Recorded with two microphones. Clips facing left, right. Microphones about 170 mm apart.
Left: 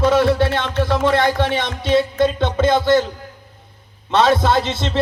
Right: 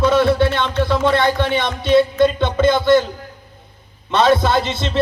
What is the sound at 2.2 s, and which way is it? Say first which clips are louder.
Music: right 2 dB; 60° right (ahead or behind).